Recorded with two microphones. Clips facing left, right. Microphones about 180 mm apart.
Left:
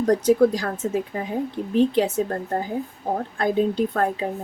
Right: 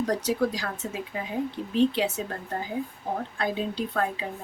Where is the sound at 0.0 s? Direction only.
50° left (ahead or behind).